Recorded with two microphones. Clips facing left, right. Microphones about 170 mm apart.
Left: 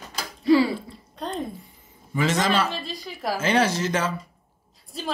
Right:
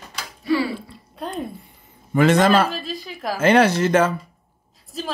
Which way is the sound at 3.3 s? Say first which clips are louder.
Right 7 dB; 60° right (ahead or behind).